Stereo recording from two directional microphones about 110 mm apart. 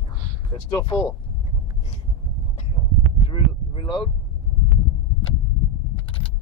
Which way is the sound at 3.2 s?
50° left (ahead or behind).